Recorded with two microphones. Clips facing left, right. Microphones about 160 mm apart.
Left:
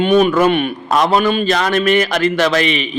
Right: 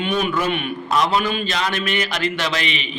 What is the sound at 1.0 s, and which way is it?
A man's voice, 55° left (ahead or behind).